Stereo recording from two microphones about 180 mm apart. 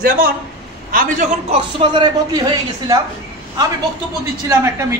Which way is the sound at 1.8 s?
25° right (ahead or behind).